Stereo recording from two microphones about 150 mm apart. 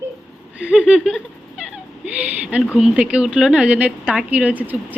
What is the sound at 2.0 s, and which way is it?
A woman's voice, 10° right (ahead or behind).